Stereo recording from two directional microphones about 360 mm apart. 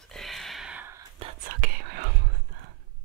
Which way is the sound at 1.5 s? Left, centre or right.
Right.